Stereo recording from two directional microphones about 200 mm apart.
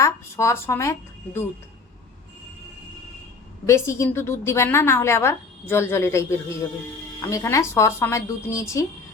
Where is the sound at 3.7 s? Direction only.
15° left (ahead or behind).